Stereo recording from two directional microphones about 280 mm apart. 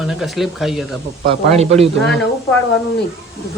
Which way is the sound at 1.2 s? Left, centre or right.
Right.